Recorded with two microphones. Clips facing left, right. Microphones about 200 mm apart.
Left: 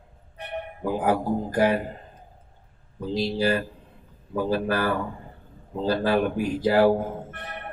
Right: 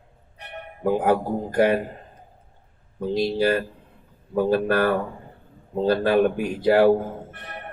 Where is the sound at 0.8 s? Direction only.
60° right (ahead or behind).